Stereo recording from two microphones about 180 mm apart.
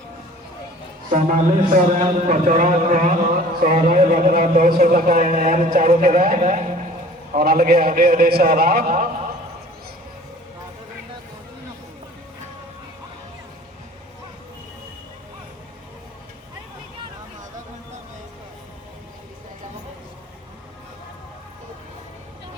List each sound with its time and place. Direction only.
1.1 s speech: 45° right (ahead or behind)